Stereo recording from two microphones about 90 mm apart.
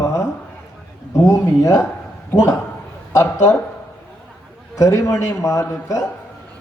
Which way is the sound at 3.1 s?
35° left (ahead or behind).